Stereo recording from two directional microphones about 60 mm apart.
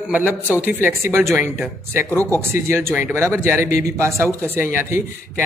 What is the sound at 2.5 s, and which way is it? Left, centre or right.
Speech, right.